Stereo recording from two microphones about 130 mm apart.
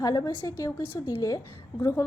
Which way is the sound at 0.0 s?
30° left (ahead or behind).